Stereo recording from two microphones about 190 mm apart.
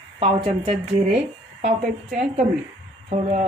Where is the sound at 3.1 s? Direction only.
40° right (ahead or behind).